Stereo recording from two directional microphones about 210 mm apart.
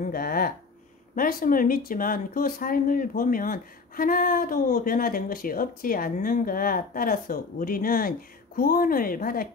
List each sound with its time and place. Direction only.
0.0 s a woman's voice: 45° left (ahead or behind)